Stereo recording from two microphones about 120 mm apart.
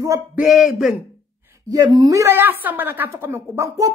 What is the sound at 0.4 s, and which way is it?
Speech, centre (ahead or behind).